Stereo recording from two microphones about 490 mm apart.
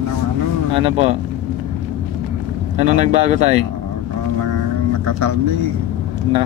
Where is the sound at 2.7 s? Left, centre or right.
Centre.